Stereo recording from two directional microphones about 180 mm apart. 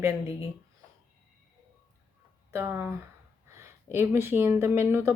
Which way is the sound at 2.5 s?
15° right (ahead or behind).